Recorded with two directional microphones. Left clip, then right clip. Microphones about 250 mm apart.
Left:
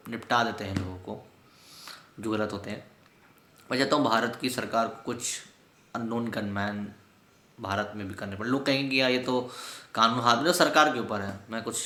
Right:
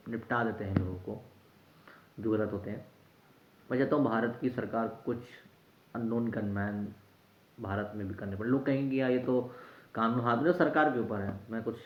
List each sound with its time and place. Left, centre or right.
0.1 s speech: centre
1.8 s a sound: centre
3.7 s speech: centre